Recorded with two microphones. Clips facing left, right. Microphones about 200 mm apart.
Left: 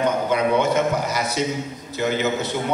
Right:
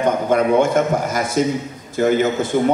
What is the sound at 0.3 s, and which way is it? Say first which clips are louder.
A man's voice: right 6 dB; 50° right (ahead or behind).